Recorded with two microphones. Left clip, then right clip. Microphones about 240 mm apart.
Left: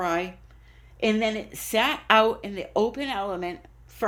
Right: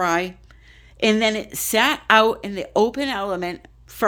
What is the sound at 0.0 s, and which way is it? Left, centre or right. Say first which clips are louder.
Speech: right 6 dB; right.